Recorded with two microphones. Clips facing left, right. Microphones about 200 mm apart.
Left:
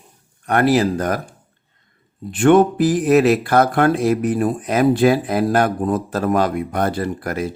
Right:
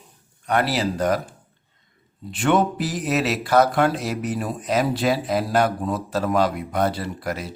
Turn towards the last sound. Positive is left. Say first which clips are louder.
# left 6 dB
turn(degrees=50)  # may be behind; listen again after turning